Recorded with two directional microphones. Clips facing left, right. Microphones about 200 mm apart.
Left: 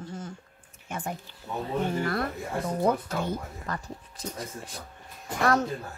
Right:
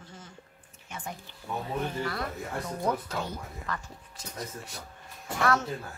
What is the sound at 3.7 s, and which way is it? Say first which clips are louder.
A woman's voice: left 2 dB; 35° left (ahead or behind).